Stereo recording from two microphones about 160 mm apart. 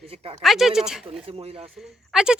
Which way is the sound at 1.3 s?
40° right (ahead or behind).